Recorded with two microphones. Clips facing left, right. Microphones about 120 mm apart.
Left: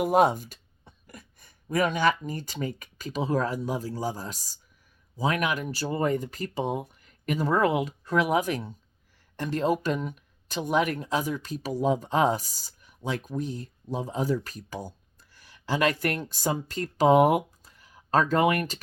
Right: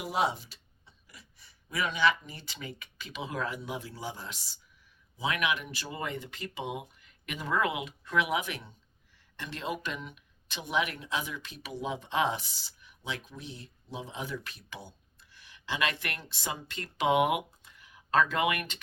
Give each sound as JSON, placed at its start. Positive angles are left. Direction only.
{"t": 0.0, "sound": "speech", "side_deg": 50}